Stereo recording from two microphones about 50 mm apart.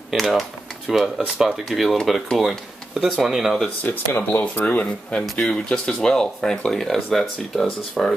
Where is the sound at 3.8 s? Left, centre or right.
Left.